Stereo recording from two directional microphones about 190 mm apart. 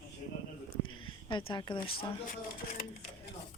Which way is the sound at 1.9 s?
50° left (ahead or behind).